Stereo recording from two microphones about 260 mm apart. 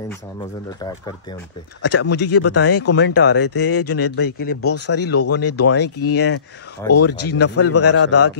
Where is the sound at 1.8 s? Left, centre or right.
Left.